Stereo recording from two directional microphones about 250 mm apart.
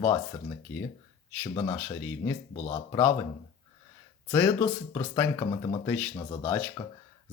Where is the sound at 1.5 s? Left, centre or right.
Centre.